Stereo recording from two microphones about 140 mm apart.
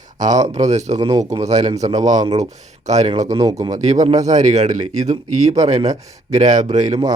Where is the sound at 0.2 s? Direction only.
60° right (ahead or behind).